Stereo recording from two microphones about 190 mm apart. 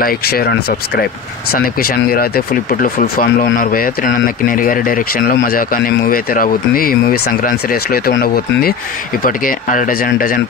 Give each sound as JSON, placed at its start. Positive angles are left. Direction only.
{"t": 0.0, "sound": "speech", "side_deg": 50}